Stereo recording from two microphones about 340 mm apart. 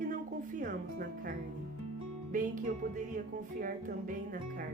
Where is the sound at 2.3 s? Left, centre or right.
Right.